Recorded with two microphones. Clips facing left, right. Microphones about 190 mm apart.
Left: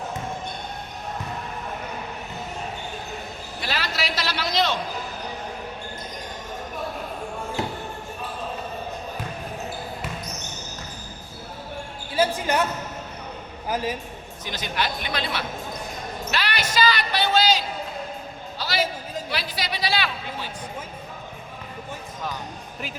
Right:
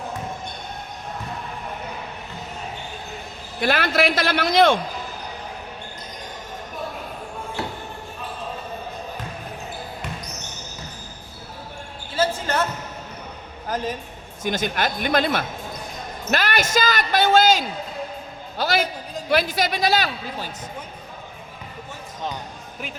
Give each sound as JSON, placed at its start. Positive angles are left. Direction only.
{"t": 3.6, "sound": "speech", "side_deg": -55}
{"t": 12.2, "sound": "basketball bounce", "side_deg": 15}
{"t": 13.7, "sound": "a man's voice", "side_deg": 10}
{"t": 14.4, "sound": "a man's voice", "side_deg": -50}
{"t": 18.5, "sound": "music", "side_deg": -50}
{"t": 19.3, "sound": "speech", "side_deg": -50}